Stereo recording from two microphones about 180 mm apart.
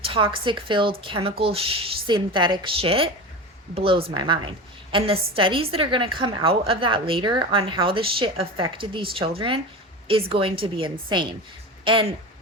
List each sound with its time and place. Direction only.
0.0 s a woman's voice: 30° right (ahead or behind)